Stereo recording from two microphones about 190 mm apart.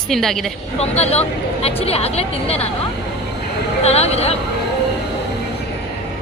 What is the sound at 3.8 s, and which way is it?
Speech, 35° left (ahead or behind).